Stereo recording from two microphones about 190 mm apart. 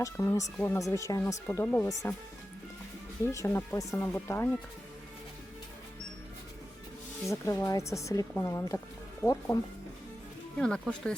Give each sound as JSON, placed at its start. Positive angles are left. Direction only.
{"t": 0.0, "sound": "speech", "side_deg": 15}
{"t": 3.2, "sound": "speech", "side_deg": 15}
{"t": 7.3, "sound": "speech", "side_deg": 15}
{"t": 10.6, "sound": "speech", "side_deg": 5}